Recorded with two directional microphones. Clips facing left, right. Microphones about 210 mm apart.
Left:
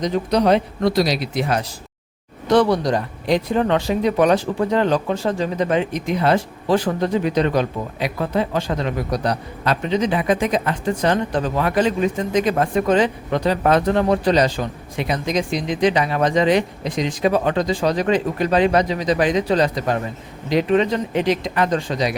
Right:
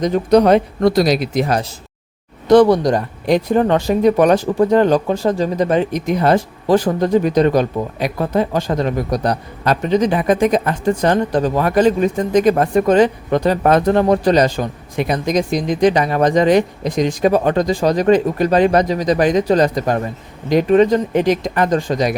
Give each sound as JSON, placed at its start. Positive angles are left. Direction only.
{"t": 0.0, "sound": "speech", "side_deg": -50}